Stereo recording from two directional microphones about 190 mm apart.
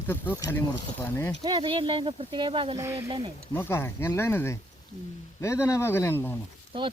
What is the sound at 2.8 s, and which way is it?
Speech, 15° right (ahead or behind).